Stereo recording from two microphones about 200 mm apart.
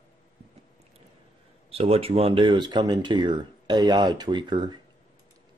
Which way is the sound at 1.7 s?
30° right (ahead or behind).